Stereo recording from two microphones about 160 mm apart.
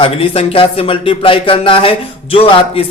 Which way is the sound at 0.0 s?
35° left (ahead or behind).